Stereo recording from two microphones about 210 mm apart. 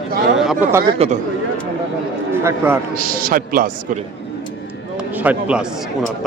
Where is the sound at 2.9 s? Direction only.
40° right (ahead or behind).